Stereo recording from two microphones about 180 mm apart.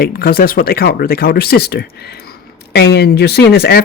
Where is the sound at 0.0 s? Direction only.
55° left (ahead or behind).